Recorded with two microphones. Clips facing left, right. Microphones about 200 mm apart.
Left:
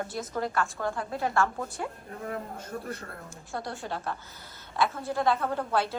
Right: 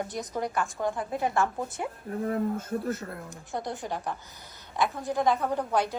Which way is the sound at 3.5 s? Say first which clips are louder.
Right 2 dB; 20° right (ahead or behind).